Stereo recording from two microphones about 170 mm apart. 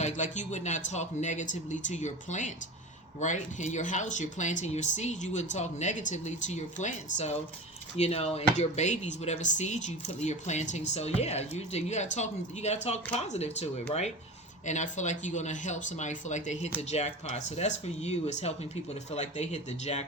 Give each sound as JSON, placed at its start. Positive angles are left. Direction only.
{"t": 0.0, "sound": "speech", "side_deg": 45}
{"t": 14.7, "sound": "speech", "side_deg": 45}